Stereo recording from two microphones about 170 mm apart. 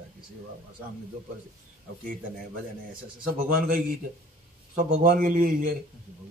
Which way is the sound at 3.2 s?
55° right (ahead or behind).